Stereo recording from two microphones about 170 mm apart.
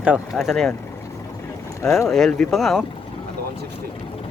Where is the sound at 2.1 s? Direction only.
Centre (ahead or behind).